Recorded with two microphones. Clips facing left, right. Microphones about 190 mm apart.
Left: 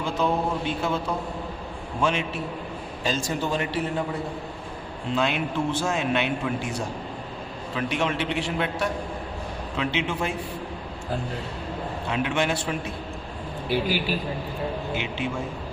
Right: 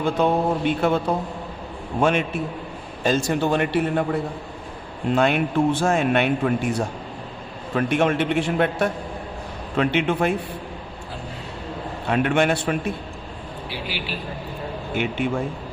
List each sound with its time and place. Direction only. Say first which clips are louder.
0.0 s mantra: right 5 dB; 55° right (ahead or behind)
5.1 s a man's voice: right 6 dB; 55° right (ahead or behind)
9.7 s mantra: right 7 dB; 55° right (ahead or behind)
12.0 s mantra: right 6 dB; 55° right (ahead or behind)
13.7 s a man's voice: left 7 dB; 45° left (ahead or behind)
14.9 s a man's voice: right 5 dB; 55° right (ahead or behind)